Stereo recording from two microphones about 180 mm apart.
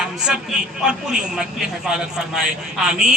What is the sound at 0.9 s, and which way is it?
A man's voice, 5° right (ahead or behind).